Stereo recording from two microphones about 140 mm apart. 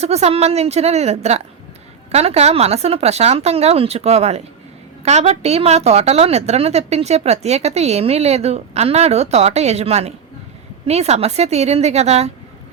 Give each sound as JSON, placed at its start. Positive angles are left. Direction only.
{"t": 0.0, "sound": "a woman's voice", "side_deg": -50}